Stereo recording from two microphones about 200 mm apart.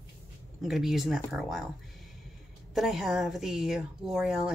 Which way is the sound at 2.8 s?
Centre (ahead or behind).